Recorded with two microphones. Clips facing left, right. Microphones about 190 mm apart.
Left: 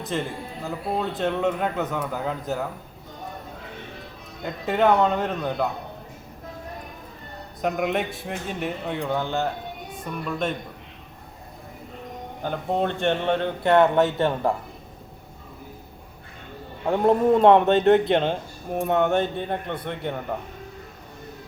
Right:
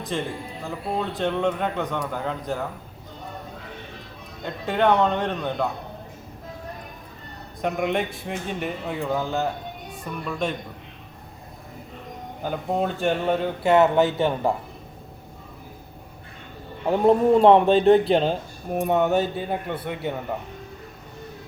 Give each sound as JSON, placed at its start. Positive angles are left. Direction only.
{"t": 0.1, "sound": "speech", "side_deg": 0}
{"t": 4.4, "sound": "speech", "side_deg": 5}
{"t": 7.6, "sound": "speech", "side_deg": 0}
{"t": 12.4, "sound": "speech", "side_deg": -5}
{"t": 16.8, "sound": "speech", "side_deg": -10}
{"t": 18.0, "sound": "speech", "side_deg": -35}
{"t": 18.9, "sound": "a man's voice", "side_deg": -5}